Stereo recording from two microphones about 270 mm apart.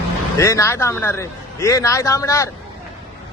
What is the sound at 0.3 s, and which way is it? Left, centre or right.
A man's voice, centre.